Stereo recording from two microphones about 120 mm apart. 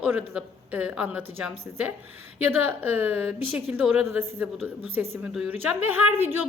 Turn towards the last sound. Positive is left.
turn(degrees=-15)  # may be behind; listen again after turning